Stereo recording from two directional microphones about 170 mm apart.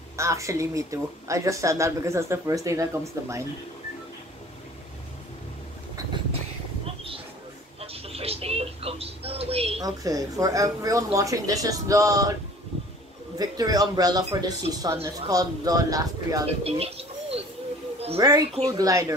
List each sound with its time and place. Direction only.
0.2 s speech: 15° right (ahead or behind)
7.8 s television: 35° right (ahead or behind)
9.8 s speech: 20° right (ahead or behind)
13.4 s speech: 20° right (ahead or behind)
16.4 s speech: 35° right (ahead or behind)
18.2 s speech: 20° right (ahead or behind)